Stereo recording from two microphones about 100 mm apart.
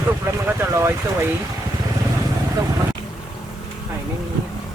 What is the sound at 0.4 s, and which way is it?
Speech, 25° right (ahead or behind).